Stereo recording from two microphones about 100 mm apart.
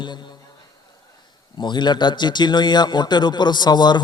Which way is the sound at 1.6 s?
50° left (ahead or behind).